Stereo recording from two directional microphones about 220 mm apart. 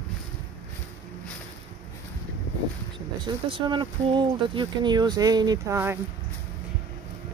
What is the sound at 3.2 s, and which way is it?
Speech, 20° right (ahead or behind).